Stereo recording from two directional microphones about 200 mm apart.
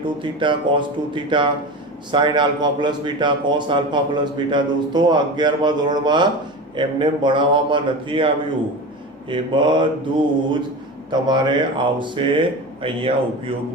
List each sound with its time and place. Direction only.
0.0 s speech: 25° right (ahead or behind)
9.3 s speech: 25° right (ahead or behind)